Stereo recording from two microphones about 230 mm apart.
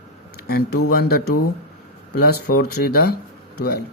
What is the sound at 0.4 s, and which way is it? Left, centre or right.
Speech, left.